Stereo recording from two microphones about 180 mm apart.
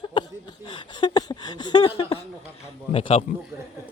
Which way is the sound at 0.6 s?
25° left (ahead or behind).